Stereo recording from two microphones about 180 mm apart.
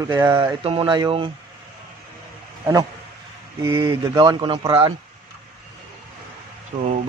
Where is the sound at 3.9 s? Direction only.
30° right (ahead or behind).